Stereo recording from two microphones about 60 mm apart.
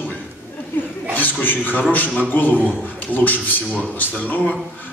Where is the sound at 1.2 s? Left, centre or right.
Left.